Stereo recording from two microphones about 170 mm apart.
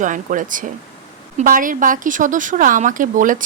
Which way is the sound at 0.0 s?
50° right (ahead or behind).